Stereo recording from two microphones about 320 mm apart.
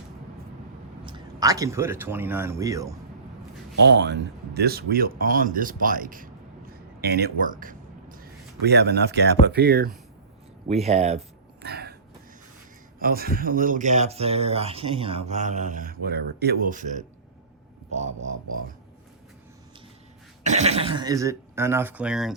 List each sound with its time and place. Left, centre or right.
1.0 s speech: centre
3.8 s a man's voice: right
11.6 s a sound: right
13.0 s speech: right
20.4 s speech: right; by 22.4 s centre